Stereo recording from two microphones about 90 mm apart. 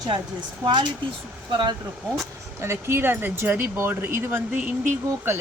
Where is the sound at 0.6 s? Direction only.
60° right (ahead or behind).